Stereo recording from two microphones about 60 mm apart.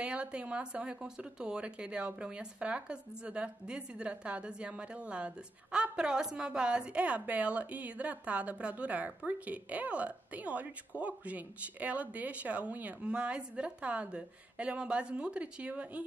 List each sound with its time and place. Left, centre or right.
0.0 s speech: centre